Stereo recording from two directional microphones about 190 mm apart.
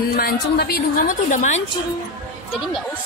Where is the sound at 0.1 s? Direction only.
55° left (ahead or behind).